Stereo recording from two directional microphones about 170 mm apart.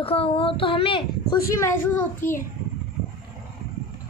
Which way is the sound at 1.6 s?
15° left (ahead or behind).